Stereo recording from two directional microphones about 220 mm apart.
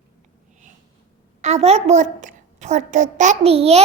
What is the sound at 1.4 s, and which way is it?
A woman's voice, 30° right (ahead or behind).